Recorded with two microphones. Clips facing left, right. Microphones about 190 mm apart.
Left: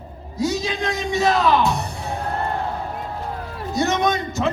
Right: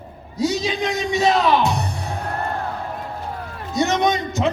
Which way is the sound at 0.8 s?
Centre (ahead or behind).